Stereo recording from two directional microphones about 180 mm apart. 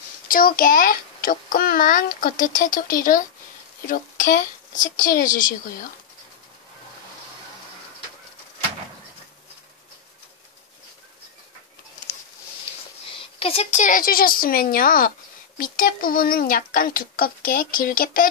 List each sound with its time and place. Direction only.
0.3 s a woman's voice: 55° left (ahead or behind)
13.1 s a woman's voice: 30° left (ahead or behind); by 18.3 s 50° left (ahead or behind)